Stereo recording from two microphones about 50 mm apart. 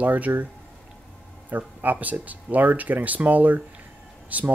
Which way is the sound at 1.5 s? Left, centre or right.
Right.